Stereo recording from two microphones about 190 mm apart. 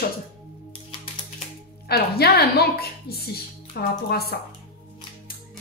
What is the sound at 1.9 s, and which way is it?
A woman's voice, 55° left (ahead or behind).